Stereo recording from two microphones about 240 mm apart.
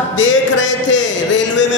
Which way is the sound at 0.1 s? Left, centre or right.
Left.